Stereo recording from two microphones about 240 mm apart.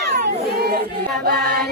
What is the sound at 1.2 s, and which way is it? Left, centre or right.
Child singing, right.